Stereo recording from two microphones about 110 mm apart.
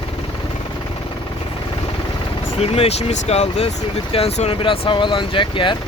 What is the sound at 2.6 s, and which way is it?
Speech, 70° left (ahead or behind).